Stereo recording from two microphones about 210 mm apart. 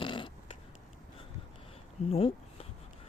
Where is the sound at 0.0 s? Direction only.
25° left (ahead or behind).